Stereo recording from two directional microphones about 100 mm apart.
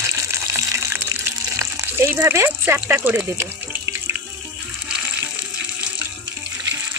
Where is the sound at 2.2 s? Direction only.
30° right (ahead or behind).